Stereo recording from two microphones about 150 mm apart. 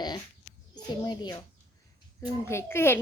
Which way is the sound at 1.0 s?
30° left (ahead or behind).